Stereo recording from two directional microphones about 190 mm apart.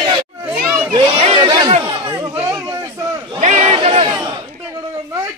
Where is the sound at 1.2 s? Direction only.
25° right (ahead or behind).